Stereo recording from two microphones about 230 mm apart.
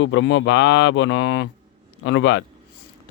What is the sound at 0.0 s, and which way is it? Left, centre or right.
Speech, left.